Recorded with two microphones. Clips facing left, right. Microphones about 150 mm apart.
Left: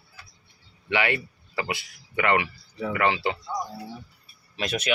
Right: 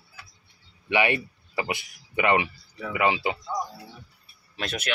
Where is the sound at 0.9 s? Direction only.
20° right (ahead or behind).